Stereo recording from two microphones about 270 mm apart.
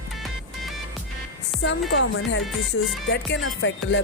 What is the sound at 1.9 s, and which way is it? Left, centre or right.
Music, left.